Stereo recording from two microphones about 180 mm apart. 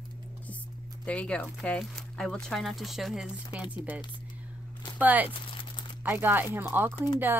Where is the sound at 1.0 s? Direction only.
5° left (ahead or behind).